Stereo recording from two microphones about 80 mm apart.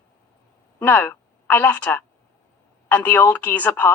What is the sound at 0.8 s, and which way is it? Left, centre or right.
A woman's voice, left.